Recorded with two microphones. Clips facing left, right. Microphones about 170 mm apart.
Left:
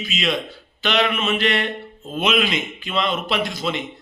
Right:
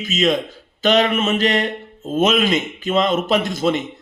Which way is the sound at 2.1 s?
45° right (ahead or behind).